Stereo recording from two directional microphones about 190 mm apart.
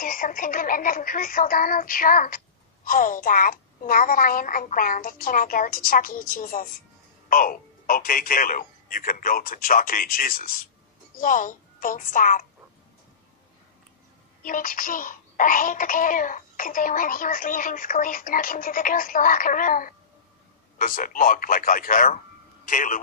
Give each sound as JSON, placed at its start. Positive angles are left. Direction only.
{"t": 0.0, "sound": "speech", "side_deg": 45}
{"t": 14.4, "sound": "speech", "side_deg": 45}